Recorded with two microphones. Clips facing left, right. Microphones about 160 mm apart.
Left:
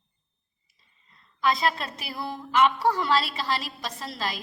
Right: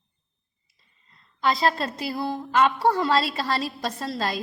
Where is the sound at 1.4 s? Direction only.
35° right (ahead or behind).